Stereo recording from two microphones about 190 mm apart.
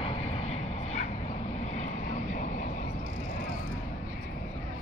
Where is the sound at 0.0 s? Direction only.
30° left (ahead or behind).